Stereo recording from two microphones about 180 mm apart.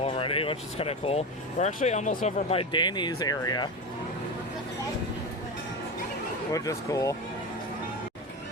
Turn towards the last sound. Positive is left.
turn(degrees=20)  # may be behind; listen again after turning